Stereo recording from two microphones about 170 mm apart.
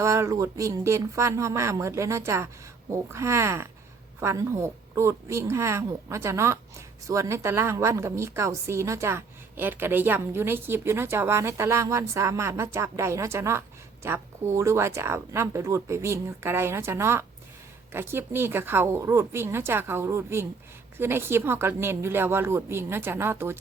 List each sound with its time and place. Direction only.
0.0 s a woman's voice: 15° right (ahead or behind)